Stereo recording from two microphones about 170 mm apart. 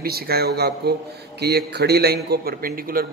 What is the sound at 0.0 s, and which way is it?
A man's voice, 65° right (ahead or behind).